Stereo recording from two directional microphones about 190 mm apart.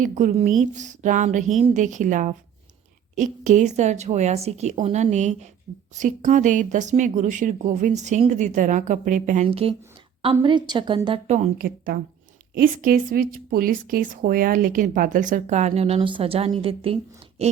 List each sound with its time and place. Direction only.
0.0 s a woman's voice: 40° right (ahead or behind)
9.5 s a woman's voice: 30° right (ahead or behind)
11.3 s a woman's voice: 45° right (ahead or behind)